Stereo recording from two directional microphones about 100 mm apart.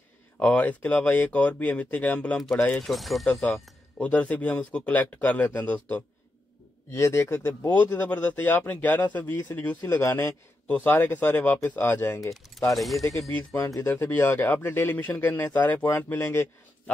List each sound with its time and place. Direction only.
0.4 s speech: 15° left (ahead or behind)
2.3 s speech: centre (ahead or behind)
4.0 s speech: 15° left (ahead or behind)
6.9 s a man's voice: 25° left (ahead or behind)
10.7 s a man's voice: 15° left (ahead or behind)
12.5 s speech: centre (ahead or behind)
13.5 s speech: 30° left (ahead or behind)
13.8 s a man's voice: 20° left (ahead or behind)